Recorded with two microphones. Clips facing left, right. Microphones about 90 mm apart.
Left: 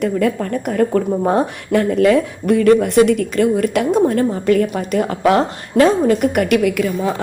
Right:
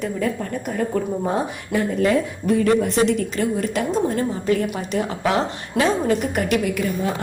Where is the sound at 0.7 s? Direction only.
75° left (ahead or behind).